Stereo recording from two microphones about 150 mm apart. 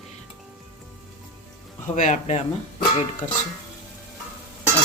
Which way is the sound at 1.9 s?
60° left (ahead or behind).